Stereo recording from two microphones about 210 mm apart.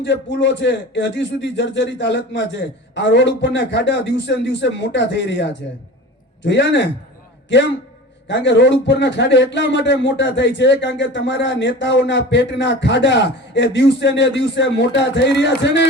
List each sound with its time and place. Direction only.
0.0 s a man's voice: 60° left (ahead or behind)